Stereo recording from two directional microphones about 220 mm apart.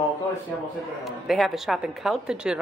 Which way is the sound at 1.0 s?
Centre (ahead or behind).